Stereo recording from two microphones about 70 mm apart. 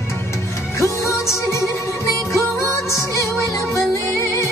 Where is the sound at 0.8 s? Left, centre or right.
Left.